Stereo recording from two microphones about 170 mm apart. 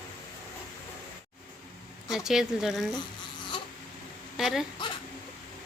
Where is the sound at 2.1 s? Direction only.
Centre (ahead or behind).